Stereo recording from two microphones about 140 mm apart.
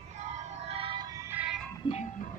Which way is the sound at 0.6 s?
40° right (ahead or behind).